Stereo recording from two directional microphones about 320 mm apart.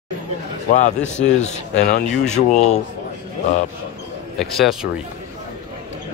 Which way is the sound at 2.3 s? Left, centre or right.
Left.